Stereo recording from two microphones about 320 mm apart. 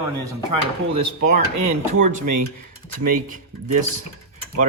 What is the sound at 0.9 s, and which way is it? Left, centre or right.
Speech, centre.